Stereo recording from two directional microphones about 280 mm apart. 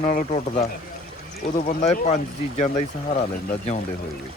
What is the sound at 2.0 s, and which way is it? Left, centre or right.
Speech, left.